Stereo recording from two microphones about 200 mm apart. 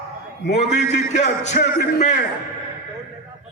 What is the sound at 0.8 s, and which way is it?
A man's voice, 35° left (ahead or behind).